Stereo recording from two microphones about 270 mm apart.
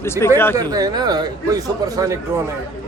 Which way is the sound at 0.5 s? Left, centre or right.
Centre.